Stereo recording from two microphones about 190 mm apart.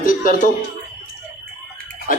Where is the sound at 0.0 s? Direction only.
50° left (ahead or behind).